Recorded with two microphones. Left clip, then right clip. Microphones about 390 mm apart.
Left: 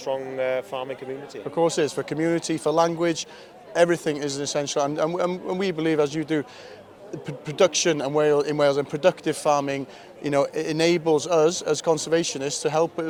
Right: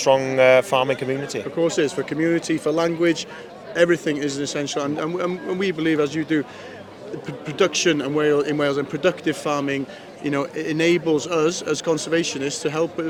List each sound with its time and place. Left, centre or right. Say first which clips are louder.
0.0 s speech: right 11 dB; right
1.5 s speech: right 1 dB; left